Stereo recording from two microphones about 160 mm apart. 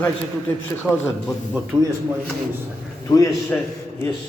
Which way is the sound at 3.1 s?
20° left (ahead or behind).